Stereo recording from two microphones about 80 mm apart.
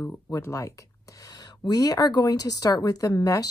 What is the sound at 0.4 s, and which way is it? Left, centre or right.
Speech, left.